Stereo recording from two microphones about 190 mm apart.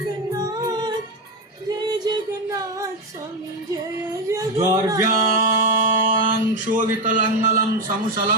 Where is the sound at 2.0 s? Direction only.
20° right (ahead or behind).